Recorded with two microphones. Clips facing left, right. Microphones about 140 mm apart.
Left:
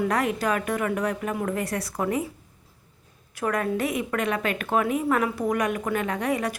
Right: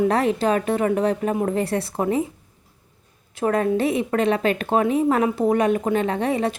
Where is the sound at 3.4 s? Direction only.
30° right (ahead or behind).